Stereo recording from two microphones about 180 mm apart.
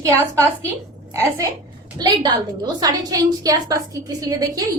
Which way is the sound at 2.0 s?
20° right (ahead or behind).